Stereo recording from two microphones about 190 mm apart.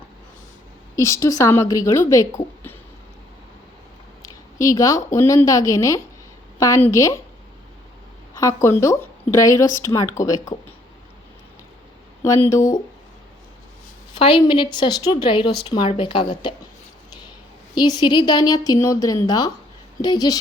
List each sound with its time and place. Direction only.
0.9 s speech: 15° left (ahead or behind)
4.2 s a woman's voice: 15° left (ahead or behind)
8.4 s a woman's voice: 15° left (ahead or behind)
12.2 s speech: 15° left (ahead or behind)
14.2 s a woman's voice: 25° left (ahead or behind)
17.7 s a woman's voice: 20° left (ahead or behind)